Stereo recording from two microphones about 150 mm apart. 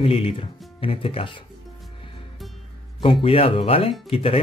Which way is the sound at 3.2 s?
40° left (ahead or behind).